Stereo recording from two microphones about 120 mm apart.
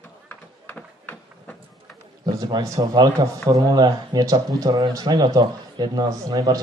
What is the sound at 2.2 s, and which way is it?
A man's voice, 35° right (ahead or behind).